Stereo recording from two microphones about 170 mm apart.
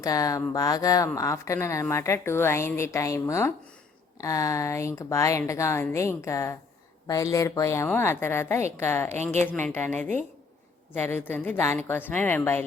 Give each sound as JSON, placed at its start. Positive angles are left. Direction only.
{"t": 0.0, "sound": "a woman's voice", "side_deg": 20}